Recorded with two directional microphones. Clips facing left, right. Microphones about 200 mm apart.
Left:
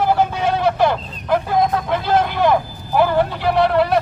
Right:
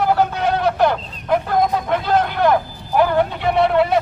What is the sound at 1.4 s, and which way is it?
Vehicle, 5° left (ahead or behind).